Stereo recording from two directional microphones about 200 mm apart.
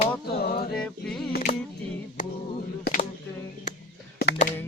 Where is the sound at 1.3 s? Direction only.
45° left (ahead or behind).